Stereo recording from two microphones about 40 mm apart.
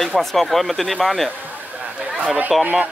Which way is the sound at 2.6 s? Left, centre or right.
Right.